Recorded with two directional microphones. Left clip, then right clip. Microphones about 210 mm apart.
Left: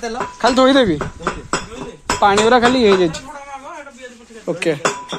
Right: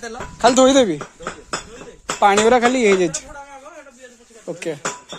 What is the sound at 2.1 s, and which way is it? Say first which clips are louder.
Speech: left 1 dB; 40° right (ahead or behind).